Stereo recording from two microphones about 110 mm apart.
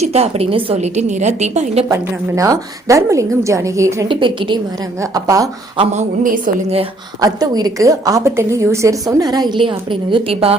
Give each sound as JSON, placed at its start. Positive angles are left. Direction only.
{"t": 0.0, "sound": "a woman's voice", "side_deg": -70}
{"t": 1.9, "sound": "a woman's voice", "side_deg": -30}
{"t": 4.1, "sound": "a woman's voice", "side_deg": -50}
{"t": 4.9, "sound": "a woman's voice", "side_deg": -30}
{"t": 7.2, "sound": "a woman's voice", "side_deg": -35}